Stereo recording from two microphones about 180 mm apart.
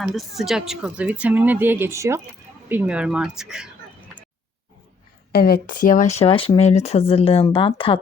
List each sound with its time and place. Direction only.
0.0 s speech: centre (ahead or behind)
5.3 s speech: 60° left (ahead or behind); by 7.9 s 30° left (ahead or behind)